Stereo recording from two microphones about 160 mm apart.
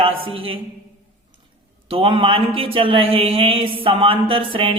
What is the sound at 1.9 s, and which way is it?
A man's voice, 35° right (ahead or behind).